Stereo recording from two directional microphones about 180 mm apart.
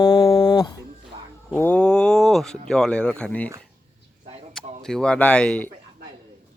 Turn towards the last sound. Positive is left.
turn(degrees=5)  # may be behind; listen again after turning